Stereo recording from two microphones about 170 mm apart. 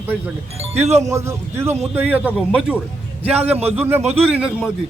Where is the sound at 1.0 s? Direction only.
15° right (ahead or behind).